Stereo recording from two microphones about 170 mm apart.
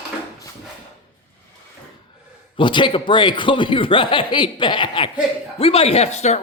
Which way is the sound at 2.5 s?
30° left (ahead or behind).